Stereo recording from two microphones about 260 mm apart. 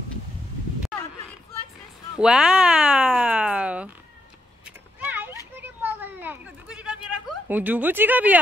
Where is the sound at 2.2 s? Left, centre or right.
Centre.